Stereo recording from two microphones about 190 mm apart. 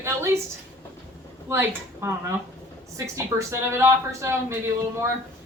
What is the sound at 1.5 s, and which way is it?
Speech, 15° right (ahead or behind).